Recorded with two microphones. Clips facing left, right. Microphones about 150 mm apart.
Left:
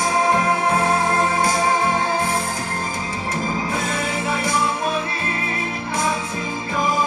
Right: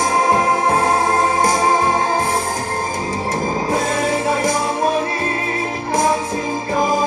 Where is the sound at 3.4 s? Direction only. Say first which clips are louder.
Right 5 dB; 40° right (ahead or behind).